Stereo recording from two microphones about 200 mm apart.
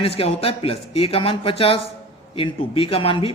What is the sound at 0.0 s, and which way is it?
A man's voice, 30° left (ahead or behind).